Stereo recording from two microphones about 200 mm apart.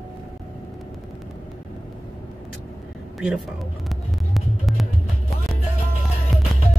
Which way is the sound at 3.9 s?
Centre (ahead or behind).